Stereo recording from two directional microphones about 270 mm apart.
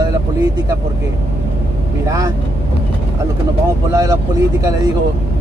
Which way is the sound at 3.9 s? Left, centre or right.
Centre.